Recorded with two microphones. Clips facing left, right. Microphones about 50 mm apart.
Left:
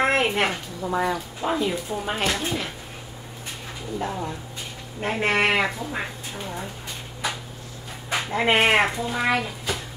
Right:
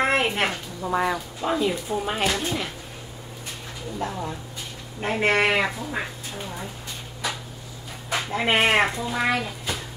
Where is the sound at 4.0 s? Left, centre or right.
Centre.